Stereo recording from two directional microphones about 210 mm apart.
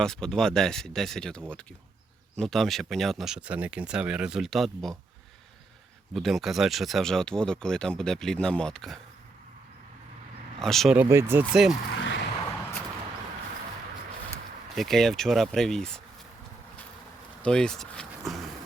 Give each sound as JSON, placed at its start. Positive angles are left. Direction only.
{"t": 0.0, "sound": "speech", "side_deg": 5}
{"t": 6.1, "sound": "speech", "side_deg": 0}
{"t": 10.6, "sound": "speech", "side_deg": 0}
{"t": 11.9, "sound": "a sound", "side_deg": 60}
{"t": 14.8, "sound": "speech", "side_deg": 0}
{"t": 17.4, "sound": "speech", "side_deg": 5}